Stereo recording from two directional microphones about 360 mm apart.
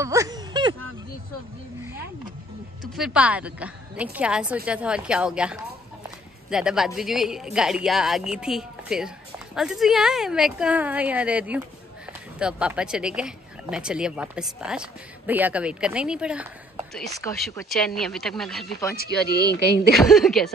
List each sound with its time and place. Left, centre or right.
0.0 s a sound: centre
2.8 s speech: centre
6.0 s a sound: centre
6.9 s speech: centre
18.9 s speech: left
19.9 s speech: centre